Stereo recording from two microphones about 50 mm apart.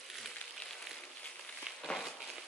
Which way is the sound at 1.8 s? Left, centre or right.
Centre.